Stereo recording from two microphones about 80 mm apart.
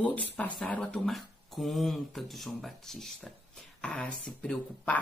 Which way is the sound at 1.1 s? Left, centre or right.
Centre.